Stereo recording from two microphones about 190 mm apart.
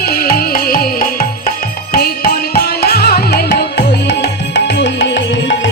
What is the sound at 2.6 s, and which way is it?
Music, 55° left (ahead or behind).